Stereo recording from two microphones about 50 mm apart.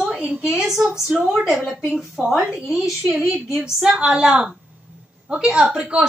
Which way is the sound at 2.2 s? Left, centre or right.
Right.